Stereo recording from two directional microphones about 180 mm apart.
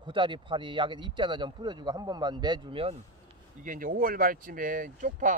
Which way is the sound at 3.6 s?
50° right (ahead or behind).